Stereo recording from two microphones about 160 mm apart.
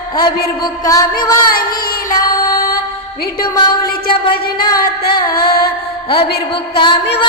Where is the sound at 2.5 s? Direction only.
65° left (ahead or behind).